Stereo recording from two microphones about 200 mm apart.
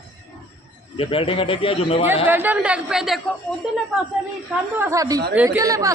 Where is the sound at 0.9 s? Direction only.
25° left (ahead or behind).